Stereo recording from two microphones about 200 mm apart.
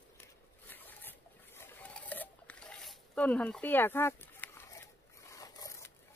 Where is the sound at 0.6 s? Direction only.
10° left (ahead or behind).